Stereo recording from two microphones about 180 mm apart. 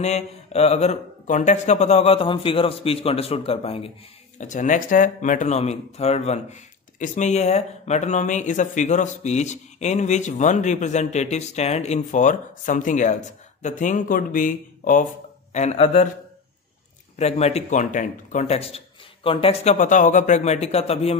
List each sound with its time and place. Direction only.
0.0 s speech: 35° left (ahead or behind)
4.4 s speech: 45° left (ahead or behind)
15.5 s speech: 35° left (ahead or behind)
17.2 s speech: 35° left (ahead or behind)